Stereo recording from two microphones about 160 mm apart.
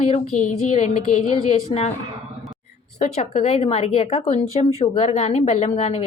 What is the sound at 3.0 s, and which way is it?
Speech, 45° left (ahead or behind).